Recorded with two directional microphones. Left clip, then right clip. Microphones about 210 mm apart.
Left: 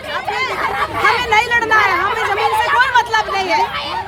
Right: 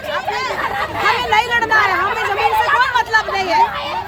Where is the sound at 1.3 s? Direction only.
20° left (ahead or behind).